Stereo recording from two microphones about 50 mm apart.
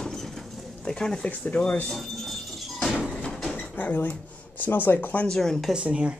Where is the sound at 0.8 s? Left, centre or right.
Centre.